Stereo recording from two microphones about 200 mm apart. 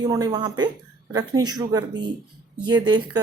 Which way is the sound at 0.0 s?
20° right (ahead or behind).